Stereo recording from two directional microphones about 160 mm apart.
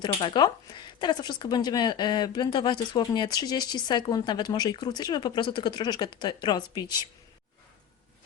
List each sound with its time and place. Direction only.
0.0 s speech: 30° left (ahead or behind)